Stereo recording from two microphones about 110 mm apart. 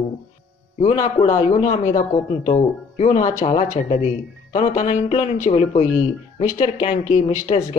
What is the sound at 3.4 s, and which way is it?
Speech, 75° left (ahead or behind).